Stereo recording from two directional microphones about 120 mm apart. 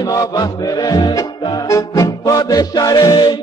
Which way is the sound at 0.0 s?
30° left (ahead or behind).